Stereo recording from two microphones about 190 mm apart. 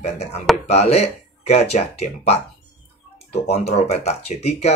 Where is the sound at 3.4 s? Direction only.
35° left (ahead or behind).